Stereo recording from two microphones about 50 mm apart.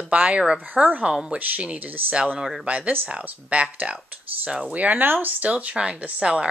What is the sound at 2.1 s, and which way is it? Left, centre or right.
Speech, right.